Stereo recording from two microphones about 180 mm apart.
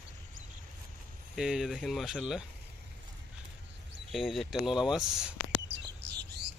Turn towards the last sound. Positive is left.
turn(degrees=-70)  # may be behind; listen again after turning